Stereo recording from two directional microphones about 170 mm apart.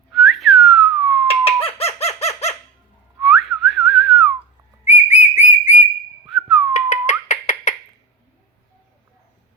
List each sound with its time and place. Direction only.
0.1 s whistling: centre (ahead or behind)
1.3 s chicken: 35° left (ahead or behind)
3.2 s whistling: centre (ahead or behind)
5.0 s whistle: 45° left (ahead or behind)
6.2 s whistling: centre (ahead or behind)
6.7 s a sound: 45° left (ahead or behind)